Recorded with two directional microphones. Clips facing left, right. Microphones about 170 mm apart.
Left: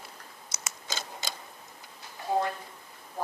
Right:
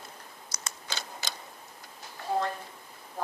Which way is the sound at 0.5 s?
25° left (ahead or behind).